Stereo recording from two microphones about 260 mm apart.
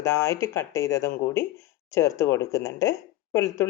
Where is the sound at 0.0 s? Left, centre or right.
Centre.